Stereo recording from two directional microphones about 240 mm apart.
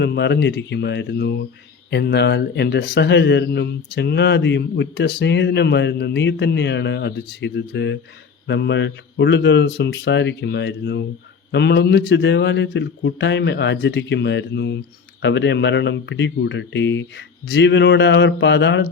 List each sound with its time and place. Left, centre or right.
0.0 s a man's voice: left